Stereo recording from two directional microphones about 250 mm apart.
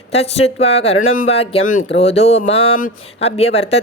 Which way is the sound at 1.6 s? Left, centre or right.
Left.